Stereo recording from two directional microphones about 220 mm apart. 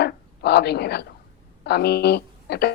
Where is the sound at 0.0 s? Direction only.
50° left (ahead or behind).